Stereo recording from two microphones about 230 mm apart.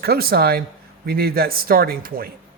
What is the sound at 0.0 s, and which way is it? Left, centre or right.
A man's voice, right.